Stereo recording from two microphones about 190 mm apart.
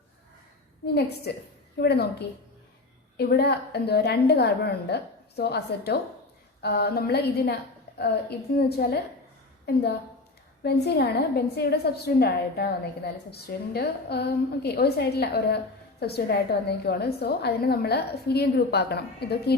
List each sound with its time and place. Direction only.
1.8 s a woman's voice: 60° left (ahead or behind)